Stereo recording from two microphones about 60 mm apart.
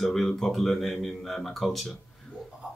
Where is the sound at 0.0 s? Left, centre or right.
Centre.